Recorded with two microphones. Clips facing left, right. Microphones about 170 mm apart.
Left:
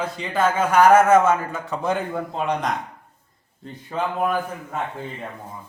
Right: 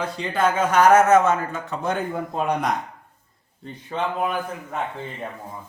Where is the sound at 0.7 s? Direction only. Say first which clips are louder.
Left 1 dB; 10° left (ahead or behind).